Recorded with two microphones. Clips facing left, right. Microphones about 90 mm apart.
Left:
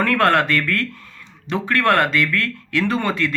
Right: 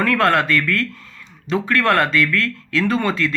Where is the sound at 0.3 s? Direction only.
25° left (ahead or behind).